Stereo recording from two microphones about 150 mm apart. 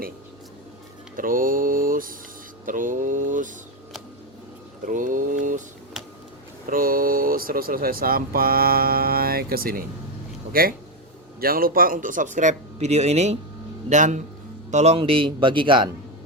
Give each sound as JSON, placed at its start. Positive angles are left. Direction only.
{"t": 1.1, "sound": "speech", "side_deg": -65}
{"t": 4.9, "sound": "speech", "side_deg": -60}
{"t": 6.7, "sound": "speech", "side_deg": -70}